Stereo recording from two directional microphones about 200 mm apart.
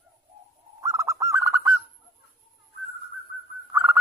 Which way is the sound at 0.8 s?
15° right (ahead or behind).